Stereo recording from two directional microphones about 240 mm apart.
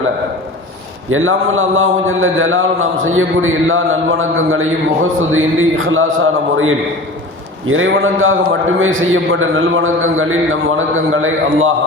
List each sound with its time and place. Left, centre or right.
1.1 s a man's voice: right